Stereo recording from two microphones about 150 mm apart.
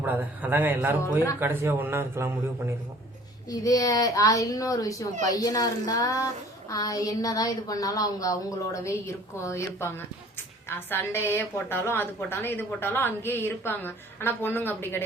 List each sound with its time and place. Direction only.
0.0 s a man's voice: 10° right (ahead or behind)
3.5 s a woman's voice: 25° left (ahead or behind)